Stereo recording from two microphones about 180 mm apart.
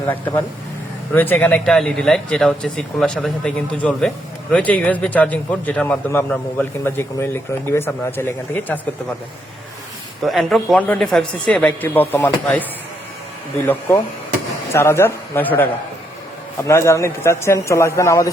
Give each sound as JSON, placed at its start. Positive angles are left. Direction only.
{"t": 0.0, "sound": "a man's voice", "side_deg": 10}
{"t": 10.2, "sound": "speech", "side_deg": 0}
{"t": 13.7, "sound": "a man's voice", "side_deg": 15}